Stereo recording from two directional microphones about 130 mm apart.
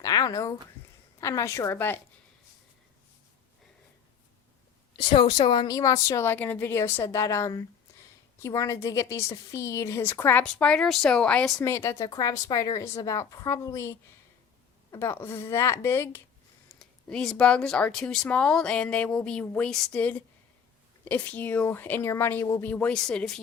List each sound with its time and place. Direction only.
0.0 s a woman's voice: 30° left (ahead or behind)
4.9 s a woman's voice: 40° left (ahead or behind); by 11.6 s 5° left (ahead or behind)
11.6 s a woman's voice: 20° left (ahead or behind)
16.7 s speech: 5° left (ahead or behind)